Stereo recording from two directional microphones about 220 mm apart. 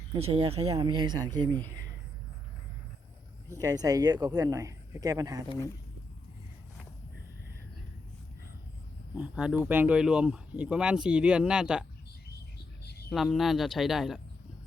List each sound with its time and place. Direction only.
0.2 s speech: 25° right (ahead or behind)
3.6 s speech: 15° right (ahead or behind)
9.1 s speech: 5° right (ahead or behind)
12.5 s bird: 50° left (ahead or behind)
13.1 s speech: centre (ahead or behind)